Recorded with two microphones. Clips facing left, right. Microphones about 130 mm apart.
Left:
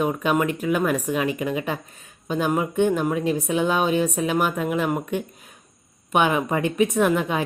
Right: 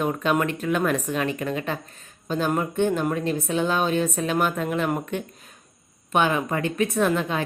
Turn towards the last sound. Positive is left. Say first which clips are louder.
# left 2 dB
turn(degrees=15)  # may be behind; listen again after turning